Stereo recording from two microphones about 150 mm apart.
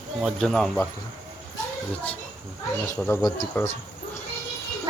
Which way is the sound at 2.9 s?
15° left (ahead or behind).